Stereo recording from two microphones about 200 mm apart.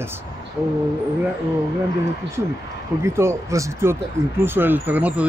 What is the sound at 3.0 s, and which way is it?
Speech, 15° right (ahead or behind).